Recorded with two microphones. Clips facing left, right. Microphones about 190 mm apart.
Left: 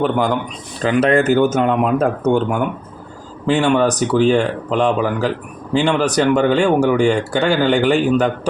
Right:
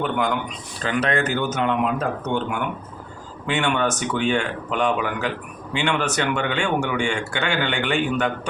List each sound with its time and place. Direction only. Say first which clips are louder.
0.0 s speech: left 6 dB; 35° left (ahead or behind)
1.1 s speech: left 9 dB; 45° left (ahead or behind)